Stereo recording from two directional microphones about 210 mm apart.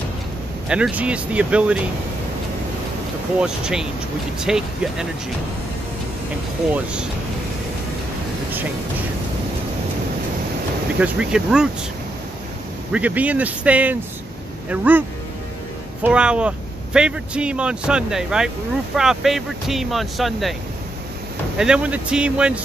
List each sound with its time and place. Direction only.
0.7 s speech: 5° right (ahead or behind)
3.3 s speech: 5° right (ahead or behind)
6.7 s speech: 5° right (ahead or behind)
11.0 s speech: 5° right (ahead or behind)
12.9 s speech: 5° right (ahead or behind)
21.5 s speech: 5° right (ahead or behind)